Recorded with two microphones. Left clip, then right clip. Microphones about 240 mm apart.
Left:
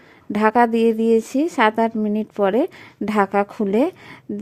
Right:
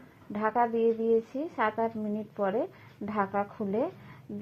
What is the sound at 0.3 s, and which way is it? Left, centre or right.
A woman's voice, left.